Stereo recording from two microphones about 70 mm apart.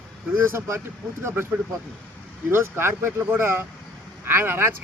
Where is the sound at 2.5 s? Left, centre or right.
Right.